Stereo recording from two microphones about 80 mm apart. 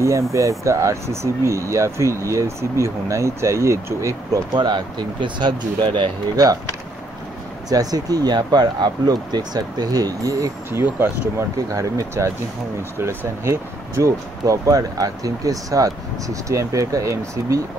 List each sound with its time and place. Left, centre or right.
0.0 s speech: right
4.6 s speech: right
6.3 s speech: right
7.7 s speech: right
10.7 s speech: right